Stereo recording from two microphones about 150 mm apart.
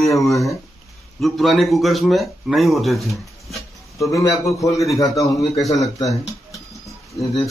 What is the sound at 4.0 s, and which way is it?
A man's voice, 20° left (ahead or behind).